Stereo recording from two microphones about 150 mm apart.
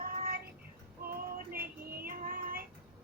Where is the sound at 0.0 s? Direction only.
75° right (ahead or behind).